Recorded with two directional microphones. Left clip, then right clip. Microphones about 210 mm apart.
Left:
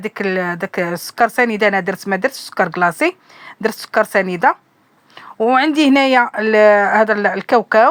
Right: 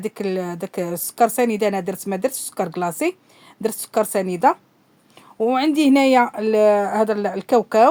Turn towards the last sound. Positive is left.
turn(degrees=0)  # may be behind; listen again after turning